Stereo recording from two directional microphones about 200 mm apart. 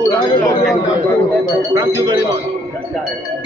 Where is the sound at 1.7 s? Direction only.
20° right (ahead or behind).